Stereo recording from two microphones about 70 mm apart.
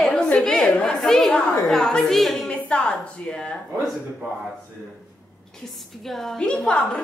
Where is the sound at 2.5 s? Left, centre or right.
Centre.